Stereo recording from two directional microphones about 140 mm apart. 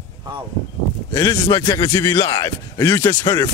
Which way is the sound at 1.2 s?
30° left (ahead or behind).